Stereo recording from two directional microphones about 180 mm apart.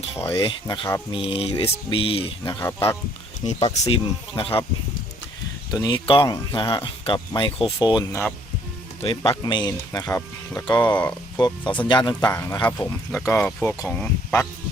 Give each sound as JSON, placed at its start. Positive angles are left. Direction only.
{"t": 0.0, "sound": "a sound", "side_deg": 35}
{"t": 0.4, "sound": "speech", "side_deg": 30}
{"t": 1.1, "sound": "mantra", "side_deg": 30}
{"t": 2.6, "sound": "speech", "side_deg": 15}
{"t": 3.4, "sound": "mantra", "side_deg": 40}
{"t": 5.7, "sound": "speech", "side_deg": 25}
{"t": 11.3, "sound": "speech", "side_deg": 25}